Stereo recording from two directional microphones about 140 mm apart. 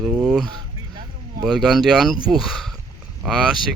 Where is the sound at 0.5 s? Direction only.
30° right (ahead or behind).